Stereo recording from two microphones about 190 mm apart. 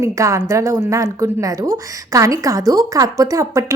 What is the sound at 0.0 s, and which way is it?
A woman's voice, 15° right (ahead or behind).